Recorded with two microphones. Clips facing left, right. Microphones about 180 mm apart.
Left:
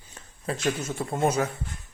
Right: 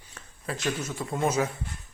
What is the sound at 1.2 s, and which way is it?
Speech, 60° left (ahead or behind).